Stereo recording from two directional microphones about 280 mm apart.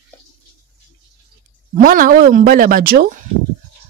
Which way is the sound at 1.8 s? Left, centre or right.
Right.